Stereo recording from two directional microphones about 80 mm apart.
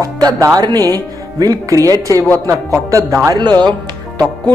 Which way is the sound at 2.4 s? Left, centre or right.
Right.